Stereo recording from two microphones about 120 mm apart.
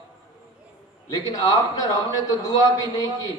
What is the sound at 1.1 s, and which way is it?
A man's voice, 30° left (ahead or behind).